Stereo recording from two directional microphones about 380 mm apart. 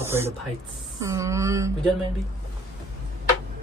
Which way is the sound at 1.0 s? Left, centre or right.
Centre.